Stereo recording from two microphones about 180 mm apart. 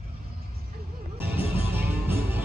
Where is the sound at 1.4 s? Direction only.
10° right (ahead or behind).